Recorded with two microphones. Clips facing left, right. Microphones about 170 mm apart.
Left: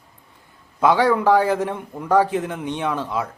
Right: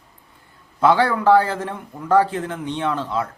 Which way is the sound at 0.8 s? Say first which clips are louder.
Even; 15° left (ahead or behind).